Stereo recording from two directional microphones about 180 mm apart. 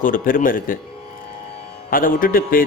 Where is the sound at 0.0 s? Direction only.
50° left (ahead or behind).